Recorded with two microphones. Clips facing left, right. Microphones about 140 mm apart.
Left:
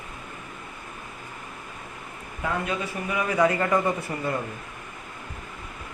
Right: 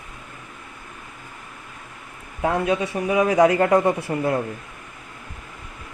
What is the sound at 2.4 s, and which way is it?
A man's voice, 75° right (ahead or behind).